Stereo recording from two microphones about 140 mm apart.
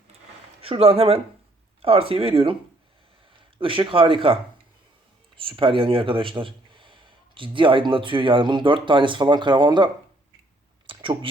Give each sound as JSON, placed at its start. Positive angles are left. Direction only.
{"t": 0.6, "sound": "speech", "side_deg": -40}
{"t": 3.6, "sound": "speech", "side_deg": -40}
{"t": 5.4, "sound": "speech", "side_deg": -40}
{"t": 10.8, "sound": "a sound", "side_deg": -40}